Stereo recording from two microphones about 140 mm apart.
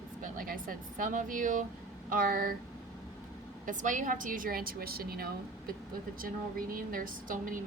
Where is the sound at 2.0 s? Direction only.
85° right.